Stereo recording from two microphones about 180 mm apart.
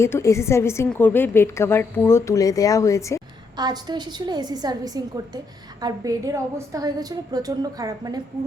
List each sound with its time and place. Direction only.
0.0 s a woman's voice: 15° left (ahead or behind)
3.6 s a woman's voice: 25° right (ahead or behind)